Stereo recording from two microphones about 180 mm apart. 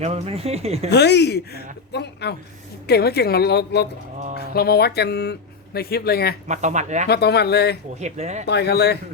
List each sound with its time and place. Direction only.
0.0 s speech: 35° right (ahead or behind)
0.9 s a woman's voice: 70° left (ahead or behind)
6.5 s speech: 40° right (ahead or behind)
7.1 s speech: 65° left (ahead or behind)
8.0 s speech: 40° right (ahead or behind)
8.4 s speech: 65° left (ahead or behind)